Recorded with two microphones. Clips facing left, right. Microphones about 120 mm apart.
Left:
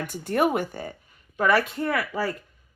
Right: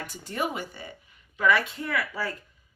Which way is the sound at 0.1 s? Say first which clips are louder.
Left 9 dB; 55° left (ahead or behind).